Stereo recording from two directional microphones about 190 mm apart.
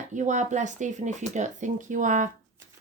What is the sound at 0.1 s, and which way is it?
Speech, 40° right (ahead or behind).